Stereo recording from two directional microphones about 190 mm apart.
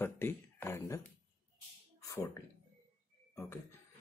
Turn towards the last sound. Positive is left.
turn(degrees=10)  # may be behind; listen again after turning